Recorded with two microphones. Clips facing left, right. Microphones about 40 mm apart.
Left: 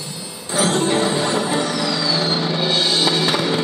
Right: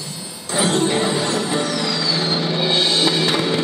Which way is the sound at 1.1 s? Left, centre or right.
Left.